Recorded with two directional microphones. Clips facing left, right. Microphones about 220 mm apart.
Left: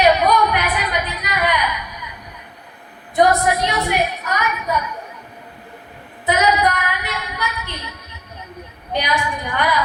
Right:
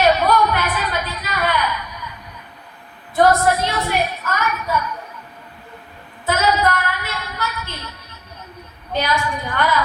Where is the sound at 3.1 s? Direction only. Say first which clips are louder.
Right 1 dB; 15° left (ahead or behind).